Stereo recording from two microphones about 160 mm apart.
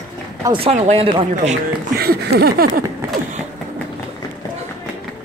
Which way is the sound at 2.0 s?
75° right (ahead or behind).